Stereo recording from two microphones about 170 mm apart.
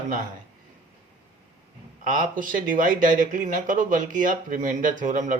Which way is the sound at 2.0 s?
50° right (ahead or behind).